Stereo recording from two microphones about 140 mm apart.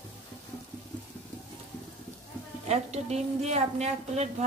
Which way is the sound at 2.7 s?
50° right (ahead or behind).